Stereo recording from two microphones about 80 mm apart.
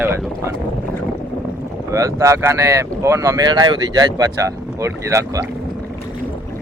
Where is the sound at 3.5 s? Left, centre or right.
Right.